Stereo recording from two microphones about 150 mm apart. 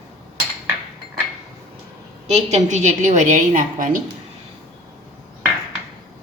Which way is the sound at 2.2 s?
50° right (ahead or behind).